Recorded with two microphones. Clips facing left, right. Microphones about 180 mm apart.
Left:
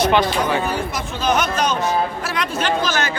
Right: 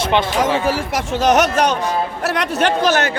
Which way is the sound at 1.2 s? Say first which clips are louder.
Right 5 dB; 75° right (ahead or behind).